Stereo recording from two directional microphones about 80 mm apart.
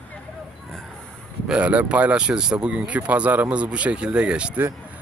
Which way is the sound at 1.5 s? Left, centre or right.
Centre.